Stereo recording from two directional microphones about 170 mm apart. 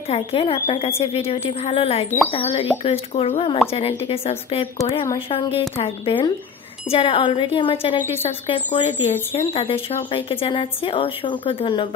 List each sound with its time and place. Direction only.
0.1 s speech: 35° left (ahead or behind)